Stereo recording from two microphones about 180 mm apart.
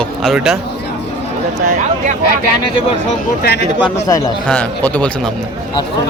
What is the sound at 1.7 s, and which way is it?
Speech, 45° right (ahead or behind).